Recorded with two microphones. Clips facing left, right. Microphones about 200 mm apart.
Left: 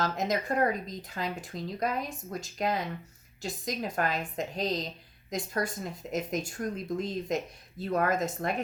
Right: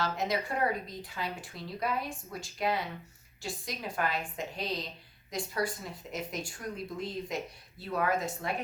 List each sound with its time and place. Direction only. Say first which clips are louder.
0.0 s speech: left 2 dB; 45° left (ahead or behind)